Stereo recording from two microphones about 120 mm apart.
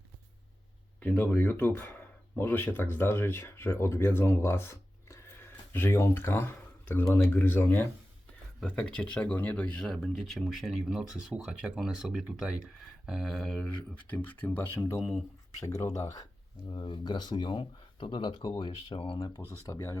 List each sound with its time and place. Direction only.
0.9 s speech: 10° left (ahead or behind); by 16.8 s 30° left (ahead or behind)
16.8 s speech: 45° left (ahead or behind)
19.5 s speech: 25° left (ahead or behind)